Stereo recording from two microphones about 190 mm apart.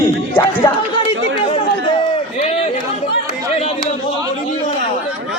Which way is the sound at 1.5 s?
30° left (ahead or behind).